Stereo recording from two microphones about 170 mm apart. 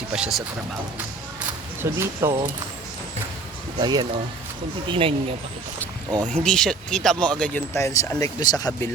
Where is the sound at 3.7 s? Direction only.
25° right (ahead or behind).